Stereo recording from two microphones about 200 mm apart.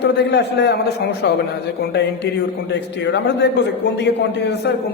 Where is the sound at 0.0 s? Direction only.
55° left (ahead or behind).